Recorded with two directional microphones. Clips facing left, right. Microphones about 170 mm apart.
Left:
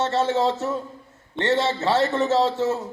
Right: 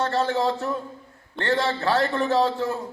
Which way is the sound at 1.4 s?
25° left (ahead or behind).